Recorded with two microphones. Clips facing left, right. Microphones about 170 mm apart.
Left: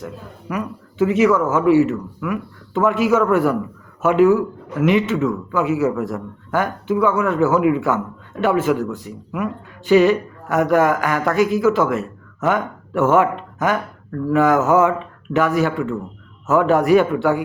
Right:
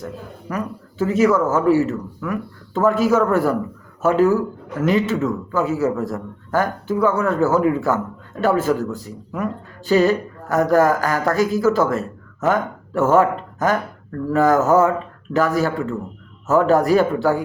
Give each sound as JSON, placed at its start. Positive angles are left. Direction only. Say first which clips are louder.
{"t": 0.5, "sound": "speech", "louder": "left 1 dB", "side_deg": -40}